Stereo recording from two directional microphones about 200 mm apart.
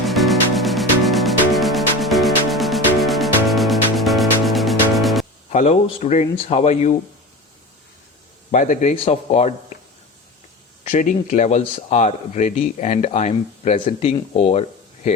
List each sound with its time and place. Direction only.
0.0 s music: centre (ahead or behind)
5.5 s speech: 35° left (ahead or behind)
8.4 s speech: 40° left (ahead or behind)
10.8 s speech: 40° left (ahead or behind)